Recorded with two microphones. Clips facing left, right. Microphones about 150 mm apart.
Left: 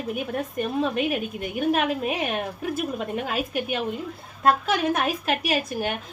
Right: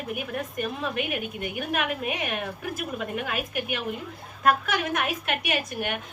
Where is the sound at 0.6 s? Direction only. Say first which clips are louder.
Left 6 dB; 30° left (ahead or behind).